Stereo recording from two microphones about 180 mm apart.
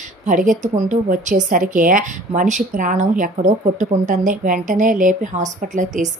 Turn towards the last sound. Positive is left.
turn(degrees=-45)  # may be behind; listen again after turning